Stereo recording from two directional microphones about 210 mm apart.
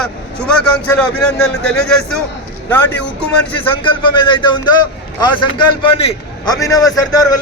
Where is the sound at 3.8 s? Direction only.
25° left (ahead or behind).